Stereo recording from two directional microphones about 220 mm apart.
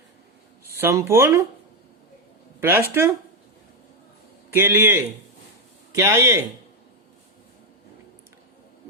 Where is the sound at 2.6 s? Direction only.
10° right (ahead or behind).